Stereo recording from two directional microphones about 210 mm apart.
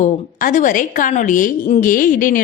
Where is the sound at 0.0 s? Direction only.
40° left (ahead or behind).